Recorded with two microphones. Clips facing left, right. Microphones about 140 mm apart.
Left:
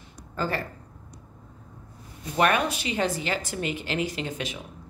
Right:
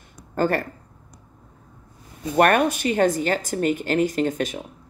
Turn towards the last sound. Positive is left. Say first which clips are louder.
# right 9 dB
turn(degrees=-45)  # may be behind; listen again after turning